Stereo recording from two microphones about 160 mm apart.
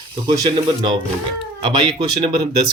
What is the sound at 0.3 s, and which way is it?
Speech, 25° right (ahead or behind).